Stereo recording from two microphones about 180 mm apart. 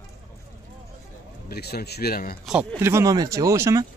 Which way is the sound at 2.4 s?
Centre (ahead or behind).